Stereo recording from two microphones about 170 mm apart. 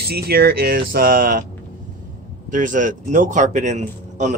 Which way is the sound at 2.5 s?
50° right (ahead or behind).